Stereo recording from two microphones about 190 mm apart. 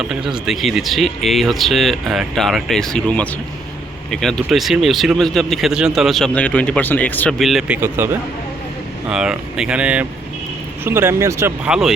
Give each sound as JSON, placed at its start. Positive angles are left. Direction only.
{"t": 0.0, "sound": "speech", "side_deg": -5}
{"t": 7.8, "sound": "speech", "side_deg": -10}